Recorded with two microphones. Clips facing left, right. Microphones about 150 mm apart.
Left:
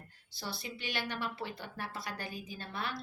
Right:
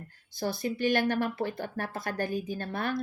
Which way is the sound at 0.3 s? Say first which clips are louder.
Right 12 dB; 50° right (ahead or behind).